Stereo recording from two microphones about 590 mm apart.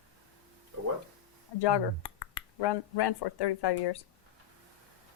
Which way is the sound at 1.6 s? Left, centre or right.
Left.